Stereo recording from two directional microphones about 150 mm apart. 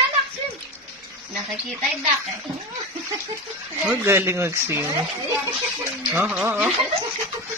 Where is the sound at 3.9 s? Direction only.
15° right (ahead or behind).